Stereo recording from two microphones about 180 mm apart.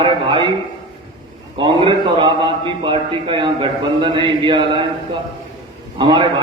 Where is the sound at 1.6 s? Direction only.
25° right (ahead or behind).